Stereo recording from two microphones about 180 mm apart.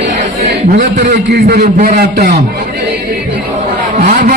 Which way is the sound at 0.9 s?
65° right (ahead or behind).